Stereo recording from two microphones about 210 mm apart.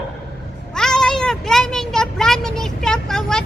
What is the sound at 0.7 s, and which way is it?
Speech, 5° left (ahead or behind).